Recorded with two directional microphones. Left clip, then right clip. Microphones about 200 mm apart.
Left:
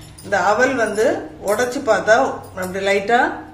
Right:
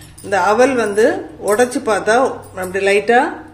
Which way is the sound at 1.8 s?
40° right (ahead or behind).